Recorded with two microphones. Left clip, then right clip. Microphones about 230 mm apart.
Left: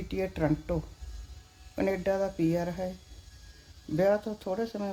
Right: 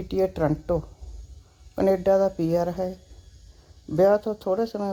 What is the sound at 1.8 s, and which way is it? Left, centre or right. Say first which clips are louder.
Speech: right 9 dB; right.